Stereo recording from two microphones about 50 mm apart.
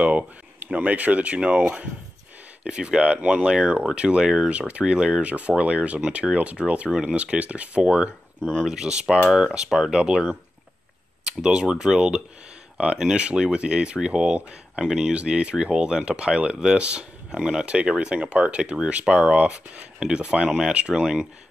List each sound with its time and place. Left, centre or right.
0.0 s speech: right
8.4 s speech: centre
8.6 s speech: centre
17.6 s speech: right
20.0 s speech: centre
21.0 s speech: centre